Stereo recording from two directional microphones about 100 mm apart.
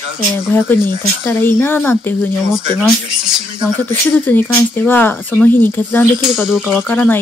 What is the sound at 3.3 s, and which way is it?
Speech, 5° right (ahead or behind).